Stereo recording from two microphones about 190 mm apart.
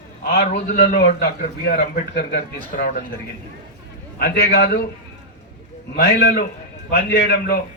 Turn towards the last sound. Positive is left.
turn(degrees=55)  # may be behind; listen again after turning